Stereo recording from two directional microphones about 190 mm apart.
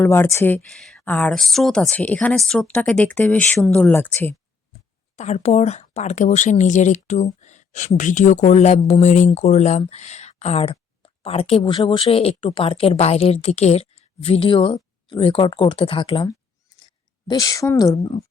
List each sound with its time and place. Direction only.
0.0 s speech: 15° left (ahead or behind)
5.1 s a woman's voice: 35° left (ahead or behind); by 18.0 s 15° left (ahead or behind)